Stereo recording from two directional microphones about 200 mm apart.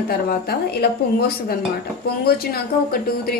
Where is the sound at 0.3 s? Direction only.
50° left (ahead or behind).